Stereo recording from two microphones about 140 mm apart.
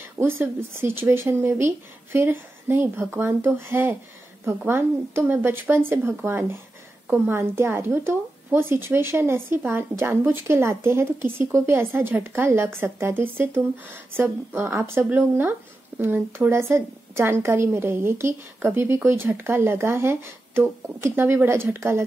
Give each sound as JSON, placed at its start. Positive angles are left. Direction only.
{"t": 0.2, "sound": "speech", "side_deg": -15}